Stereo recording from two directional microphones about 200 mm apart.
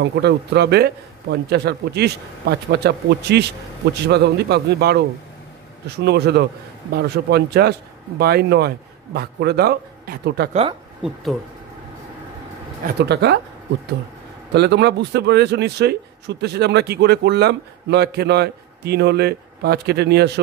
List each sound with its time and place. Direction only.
0.0 s a man's voice: 60° right (ahead or behind)
6.0 s a man's voice: 55° right (ahead or behind)
12.8 s a man's voice: 55° right (ahead or behind)
14.5 s a man's voice: 55° right (ahead or behind)